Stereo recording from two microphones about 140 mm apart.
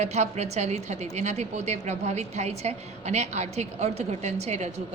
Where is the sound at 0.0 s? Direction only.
50° right (ahead or behind).